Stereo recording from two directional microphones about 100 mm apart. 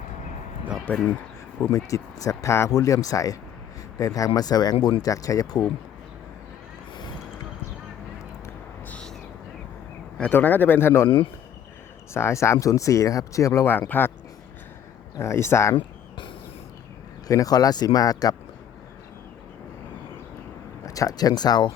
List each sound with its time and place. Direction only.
0.9 s speech: 15° left (ahead or behind)
1.7 s speech: 35° left (ahead or behind)
8.9 s owl: 10° left (ahead or behind)
10.2 s speech: 15° left (ahead or behind)
12.1 s speech: 30° left (ahead or behind)
13.7 s speech: 20° left (ahead or behind)
15.2 s speech: 25° left (ahead or behind)
15.7 s a sound: 55° left (ahead or behind)
17.2 s speech: 35° left (ahead or behind)
20.8 s speech: 35° left (ahead or behind)